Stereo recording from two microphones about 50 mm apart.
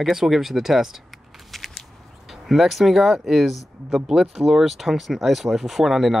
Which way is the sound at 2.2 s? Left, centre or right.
Centre.